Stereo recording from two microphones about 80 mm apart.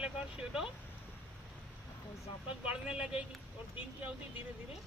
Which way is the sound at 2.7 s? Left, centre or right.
Centre.